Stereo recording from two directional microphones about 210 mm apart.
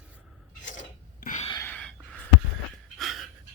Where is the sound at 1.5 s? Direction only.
10° left (ahead or behind).